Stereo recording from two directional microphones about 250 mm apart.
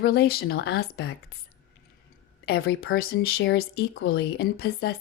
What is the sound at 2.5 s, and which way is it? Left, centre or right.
Speech, left.